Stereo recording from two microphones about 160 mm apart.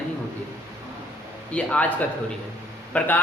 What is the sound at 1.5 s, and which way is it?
A man's voice, 10° left (ahead or behind).